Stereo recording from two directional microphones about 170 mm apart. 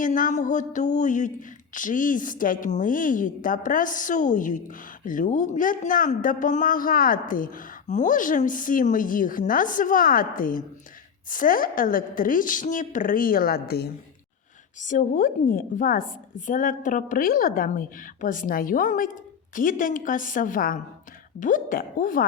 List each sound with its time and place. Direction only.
0.0 s a woman's voice: 50° left (ahead or behind); by 13.9 s 65° left (ahead or behind)
14.8 s speech: 50° left (ahead or behind)